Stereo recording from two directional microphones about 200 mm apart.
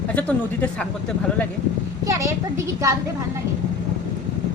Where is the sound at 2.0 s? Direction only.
15° right (ahead or behind).